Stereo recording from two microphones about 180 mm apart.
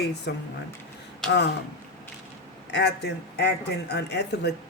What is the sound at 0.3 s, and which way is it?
Speech, 65° left (ahead or behind).